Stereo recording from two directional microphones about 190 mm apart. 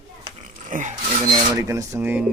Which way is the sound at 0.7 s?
40° right (ahead or behind).